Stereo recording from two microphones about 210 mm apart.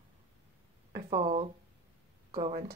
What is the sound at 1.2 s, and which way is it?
Speech, 25° right (ahead or behind).